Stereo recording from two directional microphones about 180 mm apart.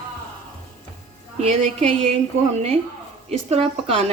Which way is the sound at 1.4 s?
40° right (ahead or behind).